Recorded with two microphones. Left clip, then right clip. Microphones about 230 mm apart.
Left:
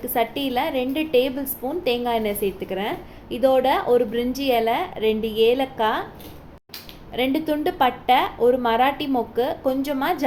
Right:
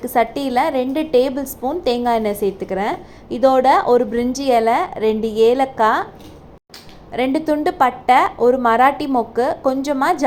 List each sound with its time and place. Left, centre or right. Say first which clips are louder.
0.0 s a woman's voice: right 5 dB; centre
7.1 s a woman's voice: right 4 dB; centre